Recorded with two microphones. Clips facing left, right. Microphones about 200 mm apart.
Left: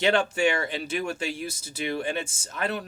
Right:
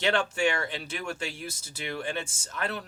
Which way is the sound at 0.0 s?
15° left (ahead or behind).